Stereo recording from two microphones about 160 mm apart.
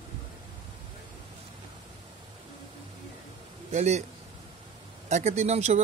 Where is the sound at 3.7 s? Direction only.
45° right (ahead or behind).